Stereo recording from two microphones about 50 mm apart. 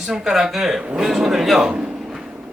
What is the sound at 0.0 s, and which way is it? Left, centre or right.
Speech, centre.